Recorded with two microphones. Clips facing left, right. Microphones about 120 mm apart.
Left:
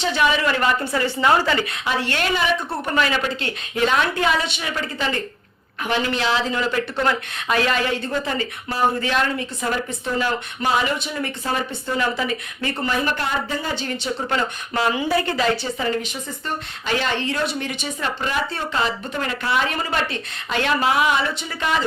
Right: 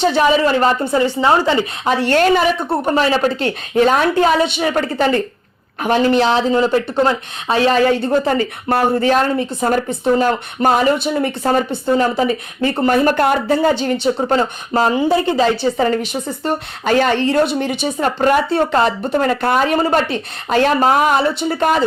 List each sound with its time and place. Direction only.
0.2 s a woman's voice: 35° right (ahead or behind)
1.8 s speech: 45° right (ahead or behind)
2.6 s a woman's voice: 30° right (ahead or behind)
4.6 s speech: 50° right (ahead or behind)
6.6 s a woman's voice: 30° right (ahead or behind)
7.9 s speech: 40° right (ahead or behind)
11.1 s a woman's voice: 40° right (ahead or behind)
14.2 s a woman's voice: 35° right (ahead or behind)
15.1 s speech: 25° right (ahead or behind)
15.8 s speech: 45° right (ahead or behind)
16.4 s speech: 60° right (ahead or behind)
16.9 s speech: 45° right (ahead or behind)
19.4 s a woman's voice: 50° right (ahead or behind); by 21.6 s 35° right (ahead or behind)